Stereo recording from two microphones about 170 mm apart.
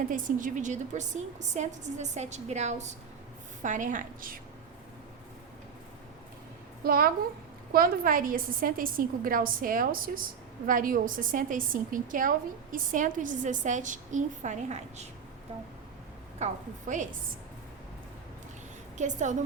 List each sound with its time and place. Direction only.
0.1 s a woman's voice: 50° right (ahead or behind)
6.8 s a woman's voice: 60° right (ahead or behind); by 15.0 s 45° right (ahead or behind)
16.4 s a woman's voice: 45° right (ahead or behind)
18.9 s a woman's voice: 45° right (ahead or behind)